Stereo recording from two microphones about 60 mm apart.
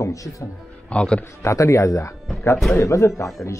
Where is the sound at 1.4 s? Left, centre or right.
Left.